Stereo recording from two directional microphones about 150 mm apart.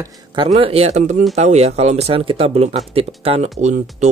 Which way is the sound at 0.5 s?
45° right (ahead or behind).